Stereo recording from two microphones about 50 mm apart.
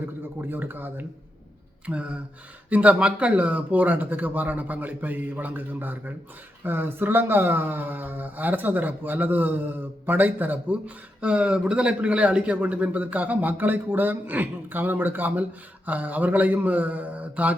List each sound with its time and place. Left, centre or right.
0.4 s a man's voice: right